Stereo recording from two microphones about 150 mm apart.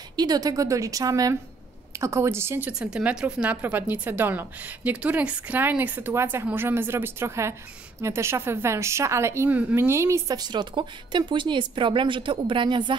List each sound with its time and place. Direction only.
0.1 s a woman's voice: 25° right (ahead or behind)